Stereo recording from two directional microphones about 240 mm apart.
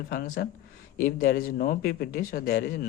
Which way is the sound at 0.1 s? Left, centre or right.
Left.